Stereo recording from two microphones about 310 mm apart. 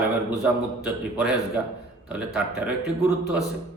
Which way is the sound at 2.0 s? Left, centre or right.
Centre.